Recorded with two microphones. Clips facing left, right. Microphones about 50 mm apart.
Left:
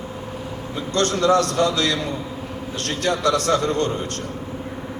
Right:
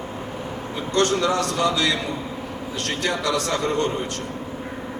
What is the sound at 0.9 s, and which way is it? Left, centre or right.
Speech, left.